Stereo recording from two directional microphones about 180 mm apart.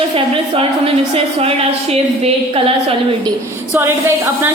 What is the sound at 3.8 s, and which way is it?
Speech, 15° right (ahead or behind).